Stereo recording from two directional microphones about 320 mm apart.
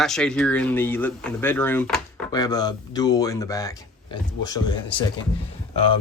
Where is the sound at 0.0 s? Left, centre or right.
Centre.